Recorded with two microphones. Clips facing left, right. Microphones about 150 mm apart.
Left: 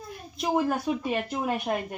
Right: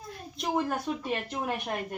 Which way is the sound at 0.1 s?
5° left (ahead or behind).